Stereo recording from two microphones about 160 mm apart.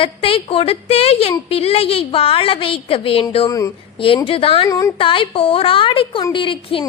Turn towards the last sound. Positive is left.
turn(degrees=30)  # may be behind; listen again after turning